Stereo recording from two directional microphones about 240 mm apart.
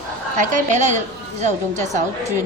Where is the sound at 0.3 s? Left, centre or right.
Right.